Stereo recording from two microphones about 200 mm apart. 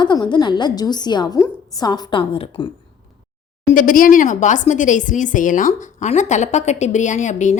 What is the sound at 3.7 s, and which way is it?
A woman's voice, 40° left (ahead or behind).